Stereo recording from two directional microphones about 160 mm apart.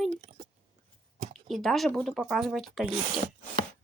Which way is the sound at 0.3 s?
40° right (ahead or behind).